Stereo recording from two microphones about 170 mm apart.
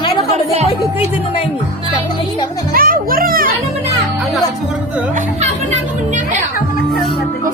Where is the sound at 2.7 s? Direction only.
55° right (ahead or behind).